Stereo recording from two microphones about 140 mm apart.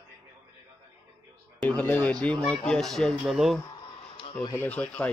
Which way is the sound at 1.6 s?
10° left (ahead or behind).